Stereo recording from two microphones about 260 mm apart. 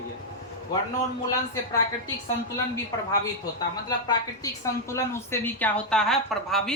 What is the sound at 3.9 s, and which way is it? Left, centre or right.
A woman's voice, centre.